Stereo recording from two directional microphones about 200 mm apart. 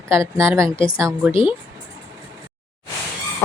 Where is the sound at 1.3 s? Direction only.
25° left (ahead or behind).